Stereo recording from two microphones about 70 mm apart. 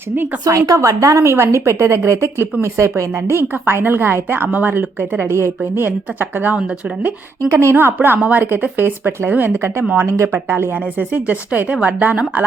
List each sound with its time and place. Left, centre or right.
0.4 s a woman's voice: right
7.4 s a woman's voice: right